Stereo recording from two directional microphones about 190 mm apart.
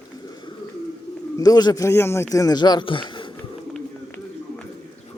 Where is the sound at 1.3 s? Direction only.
20° left (ahead or behind).